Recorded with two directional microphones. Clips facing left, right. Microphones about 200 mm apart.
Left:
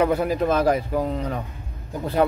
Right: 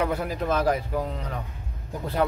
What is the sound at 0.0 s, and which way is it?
Speech, 20° left (ahead or behind).